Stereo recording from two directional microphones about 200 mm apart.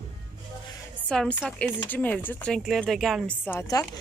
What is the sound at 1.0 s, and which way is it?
Speech, 5° left (ahead or behind).